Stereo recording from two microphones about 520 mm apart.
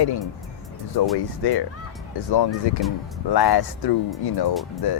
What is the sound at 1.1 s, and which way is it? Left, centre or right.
Speech, left.